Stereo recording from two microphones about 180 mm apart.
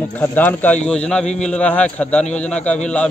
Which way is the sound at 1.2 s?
40° left (ahead or behind).